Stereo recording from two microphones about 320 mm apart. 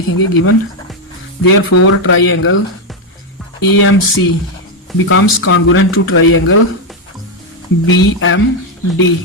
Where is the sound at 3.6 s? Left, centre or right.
Left.